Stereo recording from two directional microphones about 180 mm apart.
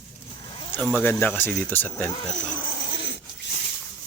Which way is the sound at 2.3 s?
45° left (ahead or behind).